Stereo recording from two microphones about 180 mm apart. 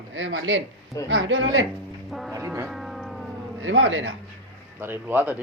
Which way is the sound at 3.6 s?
90° right.